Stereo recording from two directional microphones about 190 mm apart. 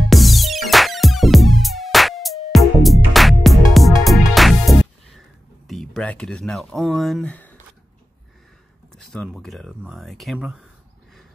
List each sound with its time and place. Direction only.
0.1 s music: centre (ahead or behind)
5.7 s speech: centre (ahead or behind)
8.9 s speech: 5° left (ahead or behind)